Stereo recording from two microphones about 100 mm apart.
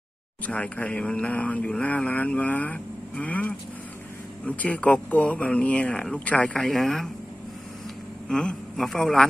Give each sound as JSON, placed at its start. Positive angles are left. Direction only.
{"t": 0.5, "sound": "speech", "side_deg": 15}
{"t": 8.3, "sound": "a man's voice", "side_deg": 5}